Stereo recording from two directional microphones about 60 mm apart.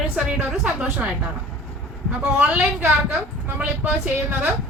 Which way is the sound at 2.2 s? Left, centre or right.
Centre.